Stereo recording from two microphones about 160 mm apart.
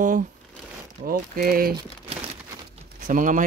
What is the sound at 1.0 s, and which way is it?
Speech, 65° right (ahead or behind).